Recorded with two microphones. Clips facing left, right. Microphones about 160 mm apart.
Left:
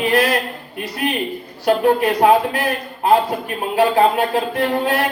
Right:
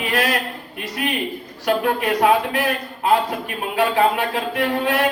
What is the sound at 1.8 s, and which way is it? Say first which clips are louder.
Speech: left 4 dB; 35° left (ahead or behind).